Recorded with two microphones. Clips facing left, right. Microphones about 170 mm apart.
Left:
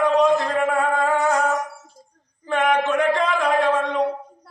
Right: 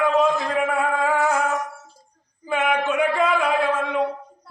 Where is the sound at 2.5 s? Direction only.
5° right (ahead or behind).